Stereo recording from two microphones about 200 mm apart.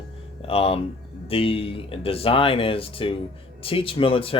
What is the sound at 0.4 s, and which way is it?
Speech, 30° left (ahead or behind).